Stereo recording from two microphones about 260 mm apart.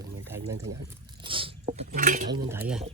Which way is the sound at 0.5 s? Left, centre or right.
Right.